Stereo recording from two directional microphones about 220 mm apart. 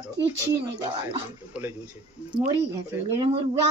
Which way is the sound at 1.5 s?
10° right (ahead or behind).